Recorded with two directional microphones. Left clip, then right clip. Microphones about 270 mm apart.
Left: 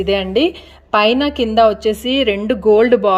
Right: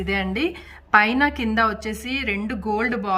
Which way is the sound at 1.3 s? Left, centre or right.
Centre.